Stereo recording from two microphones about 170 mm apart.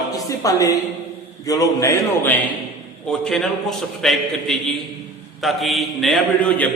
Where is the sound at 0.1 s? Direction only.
20° left (ahead or behind).